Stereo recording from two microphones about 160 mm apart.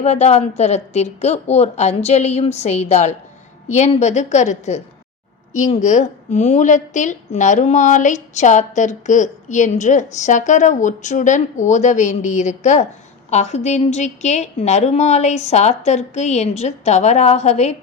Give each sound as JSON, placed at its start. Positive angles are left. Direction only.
{"t": 0.0, "sound": "a woman's voice", "side_deg": 45}